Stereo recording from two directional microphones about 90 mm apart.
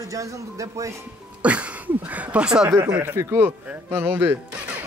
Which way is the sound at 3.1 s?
30° right (ahead or behind).